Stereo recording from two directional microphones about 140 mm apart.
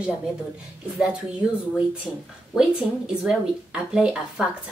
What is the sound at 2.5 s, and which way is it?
Speech, centre (ahead or behind).